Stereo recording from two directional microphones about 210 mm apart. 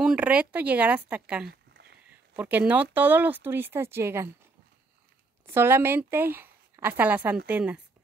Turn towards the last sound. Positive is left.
turn(degrees=-5)  # may be behind; listen again after turning